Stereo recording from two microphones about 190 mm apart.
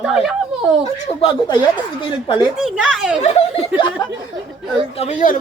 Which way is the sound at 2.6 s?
Centre (ahead or behind).